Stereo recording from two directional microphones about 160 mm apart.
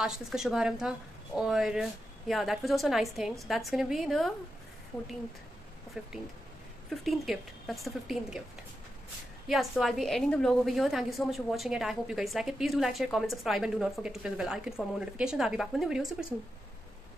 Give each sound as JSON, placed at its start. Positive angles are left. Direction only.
{"t": 0.0, "sound": "a woman's voice", "side_deg": -5}
{"t": 6.0, "sound": "a woman's voice", "side_deg": -5}
{"t": 9.5, "sound": "a woman's voice", "side_deg": 0}